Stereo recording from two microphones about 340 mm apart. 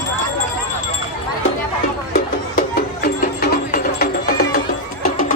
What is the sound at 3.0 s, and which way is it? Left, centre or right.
Music, left.